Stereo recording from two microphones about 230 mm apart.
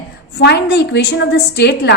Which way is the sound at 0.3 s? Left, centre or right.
Left.